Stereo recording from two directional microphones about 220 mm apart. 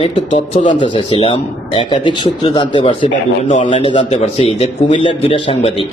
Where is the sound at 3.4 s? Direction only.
35° left (ahead or behind).